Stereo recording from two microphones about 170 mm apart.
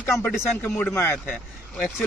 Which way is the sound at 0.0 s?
10° left (ahead or behind).